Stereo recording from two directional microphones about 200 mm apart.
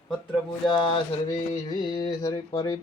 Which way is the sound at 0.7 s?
25° left (ahead or behind).